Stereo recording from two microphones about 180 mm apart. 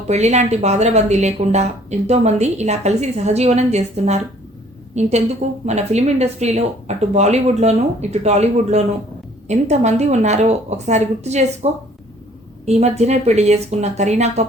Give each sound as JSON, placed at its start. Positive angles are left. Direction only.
{"t": 0.1, "sound": "a woman's voice", "side_deg": -40}